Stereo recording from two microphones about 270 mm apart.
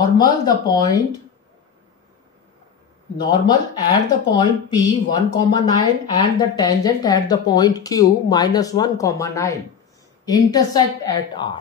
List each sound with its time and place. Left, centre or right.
0.2 s speech: centre
3.2 s speech: centre